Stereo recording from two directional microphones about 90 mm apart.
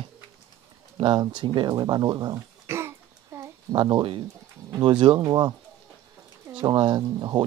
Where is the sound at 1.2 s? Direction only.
60° right (ahead or behind).